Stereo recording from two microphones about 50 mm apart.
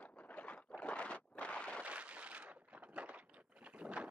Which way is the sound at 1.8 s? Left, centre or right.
Right.